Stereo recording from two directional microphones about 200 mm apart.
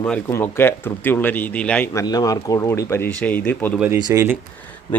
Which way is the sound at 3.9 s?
20° right (ahead or behind).